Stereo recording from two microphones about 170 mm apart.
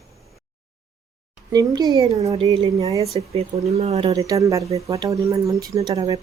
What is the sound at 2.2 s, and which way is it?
Speech, 35° right (ahead or behind).